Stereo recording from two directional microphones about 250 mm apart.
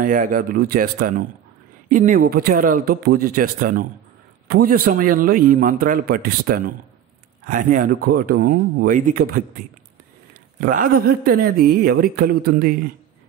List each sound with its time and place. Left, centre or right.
0.0 s a man's voice: right
10.6 s a man's voice: right